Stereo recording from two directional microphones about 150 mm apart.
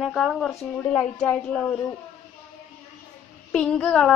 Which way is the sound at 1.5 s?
15° left (ahead or behind).